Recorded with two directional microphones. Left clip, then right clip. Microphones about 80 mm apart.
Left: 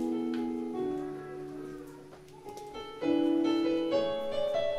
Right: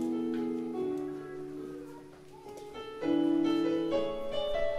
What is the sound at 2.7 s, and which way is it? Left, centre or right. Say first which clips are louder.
Music: left 1 dB; centre.